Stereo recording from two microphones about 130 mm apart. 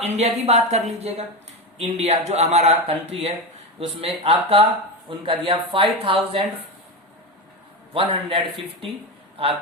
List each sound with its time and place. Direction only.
0.0 s speech: 55° right (ahead or behind)
7.9 s speech: 45° right (ahead or behind)